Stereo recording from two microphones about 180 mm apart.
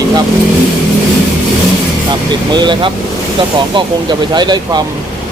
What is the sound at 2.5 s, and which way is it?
Speech, 25° right (ahead or behind).